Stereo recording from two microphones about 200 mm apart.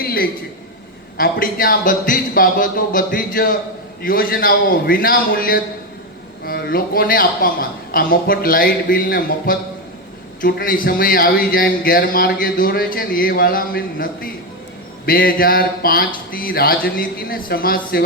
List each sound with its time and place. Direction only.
0.0 s a man's voice: 50° left (ahead or behind)